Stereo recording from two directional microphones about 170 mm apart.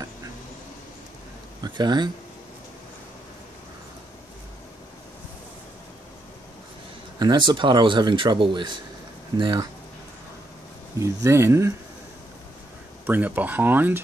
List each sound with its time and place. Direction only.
1.6 s speech: 25° right (ahead or behind)
7.2 s a man's voice: 25° right (ahead or behind)
11.2 s speech: 15° right (ahead or behind)
13.0 s speech: 10° right (ahead or behind)